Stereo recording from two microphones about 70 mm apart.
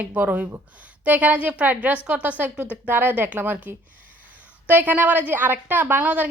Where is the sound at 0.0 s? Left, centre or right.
Right.